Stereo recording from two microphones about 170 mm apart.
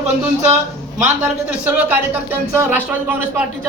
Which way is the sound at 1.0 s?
45° right (ahead or behind).